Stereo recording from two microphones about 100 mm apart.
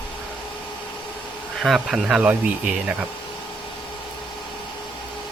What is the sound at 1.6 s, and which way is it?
Speech, 5° right (ahead or behind).